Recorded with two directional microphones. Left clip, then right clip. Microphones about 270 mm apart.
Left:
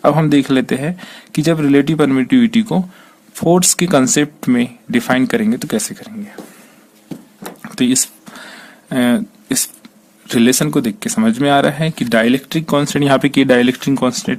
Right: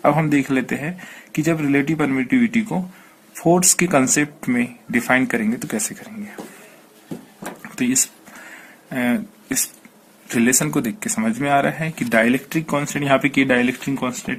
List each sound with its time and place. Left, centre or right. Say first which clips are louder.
0.0 s speech: left 5 dB; left
3.8 s speech: left 4 dB; left
4.1 s speech: left 5 dB; left
7.6 s a sound: left 5 dB; left
10.2 s speech: left 5 dB; left
10.6 s speech: left 5 dB; left